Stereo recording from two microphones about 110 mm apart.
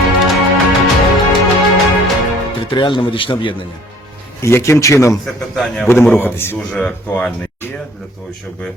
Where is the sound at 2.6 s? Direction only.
45° left (ahead or behind).